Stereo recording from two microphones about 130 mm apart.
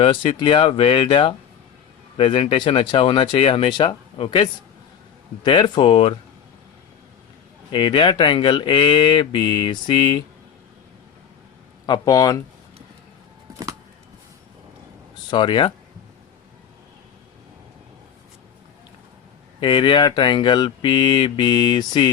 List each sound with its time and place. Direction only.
0.0 s speech: 45° left (ahead or behind)
5.5 s speech: 35° left (ahead or behind)
7.7 s speech: 40° left (ahead or behind)
11.9 s speech: 30° left (ahead or behind)
15.3 s speech: 40° left (ahead or behind)
19.5 s speech: 40° left (ahead or behind)